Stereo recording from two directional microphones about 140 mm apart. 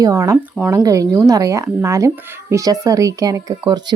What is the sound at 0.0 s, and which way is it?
Speech, 20° right (ahead or behind).